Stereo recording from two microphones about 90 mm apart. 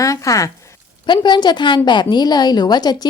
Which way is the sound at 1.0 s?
60° left (ahead or behind).